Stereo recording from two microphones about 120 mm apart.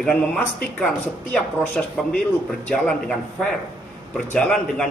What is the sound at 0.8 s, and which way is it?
A man's voice, 10° left (ahead or behind).